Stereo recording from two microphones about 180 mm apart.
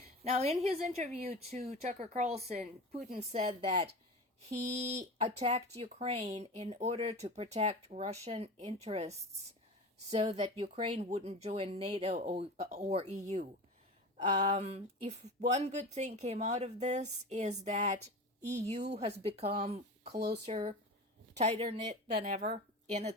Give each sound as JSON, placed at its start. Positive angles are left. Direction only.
{"t": 0.3, "sound": "speech", "side_deg": -35}
{"t": 20.1, "sound": "speech", "side_deg": -65}
{"t": 20.4, "sound": "speech", "side_deg": -30}